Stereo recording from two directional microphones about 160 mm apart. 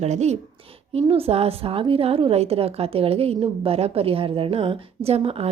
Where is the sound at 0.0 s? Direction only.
45° right (ahead or behind).